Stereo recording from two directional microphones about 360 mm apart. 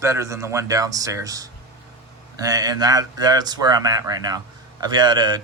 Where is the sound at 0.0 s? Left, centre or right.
Centre.